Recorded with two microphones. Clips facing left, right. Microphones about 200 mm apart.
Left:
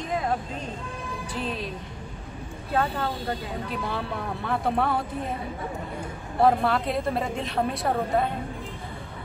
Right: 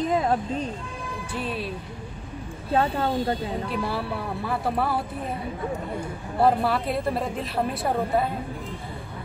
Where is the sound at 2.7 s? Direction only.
30° right (ahead or behind).